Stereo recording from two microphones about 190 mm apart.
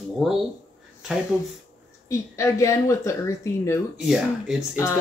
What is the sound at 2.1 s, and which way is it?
Speech, 15° left (ahead or behind).